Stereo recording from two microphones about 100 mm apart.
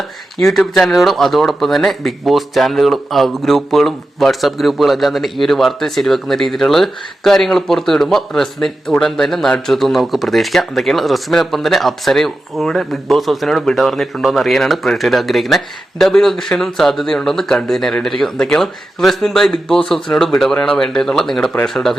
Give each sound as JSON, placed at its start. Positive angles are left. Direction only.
{"t": 0.3, "sound": "speech", "side_deg": 5}